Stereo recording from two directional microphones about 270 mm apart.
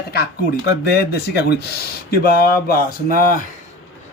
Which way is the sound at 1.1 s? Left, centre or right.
Left.